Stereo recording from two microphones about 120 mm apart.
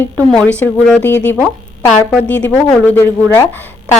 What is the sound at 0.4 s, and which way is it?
Speech, 15° left (ahead or behind).